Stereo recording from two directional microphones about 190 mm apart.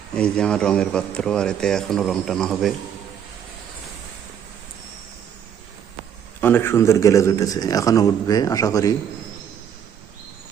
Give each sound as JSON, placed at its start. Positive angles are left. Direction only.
{"t": 0.1, "sound": "a man's voice", "side_deg": 5}
{"t": 6.4, "sound": "a man's voice", "side_deg": 10}